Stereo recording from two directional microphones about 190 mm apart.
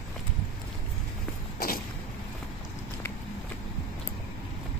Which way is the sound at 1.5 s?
50° left (ahead or behind).